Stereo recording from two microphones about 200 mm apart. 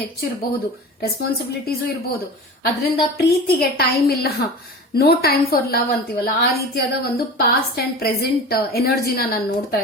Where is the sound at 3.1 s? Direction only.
50° left (ahead or behind).